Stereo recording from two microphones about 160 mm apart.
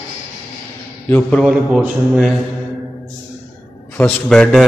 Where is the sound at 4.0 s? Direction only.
5° left (ahead or behind).